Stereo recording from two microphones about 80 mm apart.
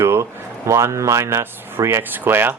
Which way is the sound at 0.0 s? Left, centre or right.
Right.